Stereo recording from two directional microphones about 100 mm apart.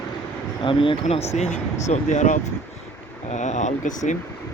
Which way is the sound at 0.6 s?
60° left (ahead or behind).